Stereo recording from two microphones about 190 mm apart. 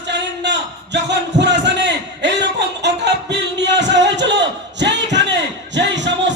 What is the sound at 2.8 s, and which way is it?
Music, 65° right (ahead or behind).